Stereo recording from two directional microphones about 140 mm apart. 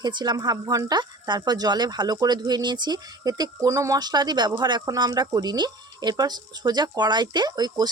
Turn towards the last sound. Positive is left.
turn(degrees=-30)  # may be behind; listen again after turning